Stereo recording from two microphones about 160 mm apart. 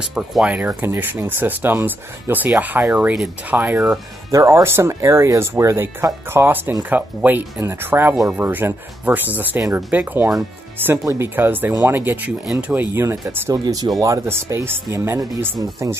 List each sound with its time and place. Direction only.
0.0 s speech: 5° right (ahead or behind)